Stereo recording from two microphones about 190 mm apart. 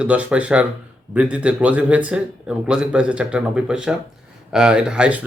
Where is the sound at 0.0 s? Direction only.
5° right (ahead or behind).